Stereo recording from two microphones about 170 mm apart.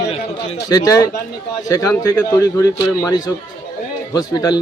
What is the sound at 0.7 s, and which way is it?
Speech, 20° left (ahead or behind).